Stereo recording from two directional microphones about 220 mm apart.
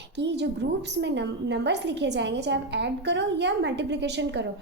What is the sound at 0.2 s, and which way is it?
A woman's voice, 50° right (ahead or behind).